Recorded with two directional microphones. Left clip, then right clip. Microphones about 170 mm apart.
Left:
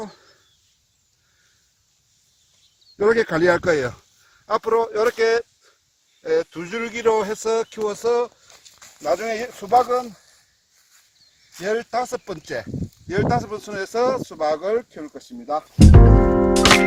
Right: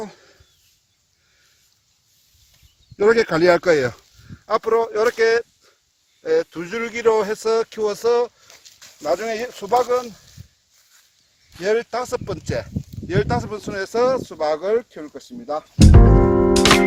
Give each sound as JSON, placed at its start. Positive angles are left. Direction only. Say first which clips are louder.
{"t": 0.0, "sound": "a sound", "louder": "right 2 dB", "side_deg": -30}
{"t": 3.0, "sound": "speech", "louder": "right 2 dB", "side_deg": -25}
{"t": 4.4, "sound": "speech", "louder": "right 1 dB", "side_deg": -5}
{"t": 9.6, "sound": "speech", "louder": "left 1 dB", "side_deg": -30}
{"t": 11.5, "sound": "speech", "louder": "right 2 dB", "side_deg": -25}
{"t": 15.9, "sound": "music", "louder": "right 1 dB", "side_deg": 0}